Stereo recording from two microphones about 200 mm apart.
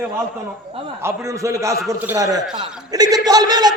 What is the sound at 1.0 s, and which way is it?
A man's voice, 15° right (ahead or behind).